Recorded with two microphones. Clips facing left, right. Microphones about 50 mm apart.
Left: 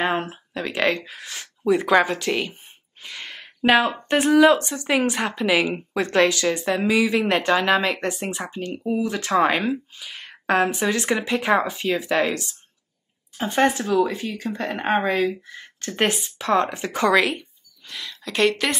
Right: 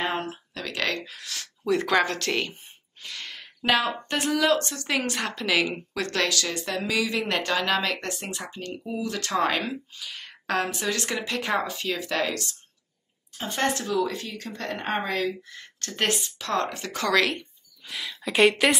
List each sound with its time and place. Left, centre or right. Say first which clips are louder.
0.0 s speech: left 5 dB; centre
3.0 s a sound: left 2 dB; left
4.1 s speech: left 8 dB; left
13.4 s speech: left 6 dB; centre
17.2 s speech: left 3 dB; centre